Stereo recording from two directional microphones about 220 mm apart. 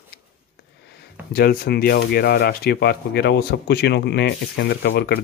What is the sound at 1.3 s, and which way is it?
Speech, 45° left (ahead or behind).